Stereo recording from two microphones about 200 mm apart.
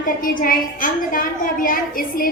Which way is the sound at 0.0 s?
45° left (ahead or behind).